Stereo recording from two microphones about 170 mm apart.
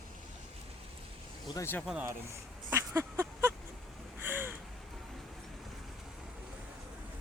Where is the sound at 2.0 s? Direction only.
15° right (ahead or behind).